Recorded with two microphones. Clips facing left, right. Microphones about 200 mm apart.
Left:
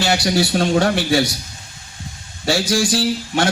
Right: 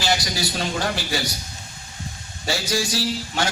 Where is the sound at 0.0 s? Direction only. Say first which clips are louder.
Left 7 dB; 65° left (ahead or behind).